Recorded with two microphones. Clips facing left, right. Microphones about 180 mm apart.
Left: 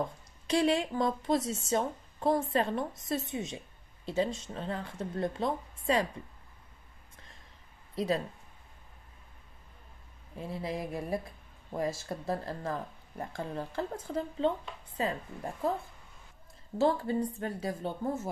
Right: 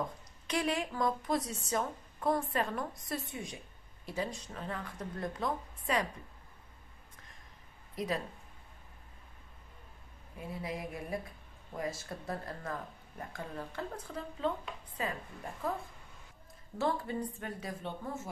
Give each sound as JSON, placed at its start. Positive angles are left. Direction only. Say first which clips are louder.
{"t": 0.5, "sound": "a woman's voice", "louder": "left 6 dB", "side_deg": 30}
{"t": 7.9, "sound": "speech", "louder": "left 5 dB", "side_deg": 30}
{"t": 10.3, "sound": "a woman's voice", "louder": "left 4 dB", "side_deg": 30}
{"t": 16.7, "sound": "a woman's voice", "louder": "left 6 dB", "side_deg": 30}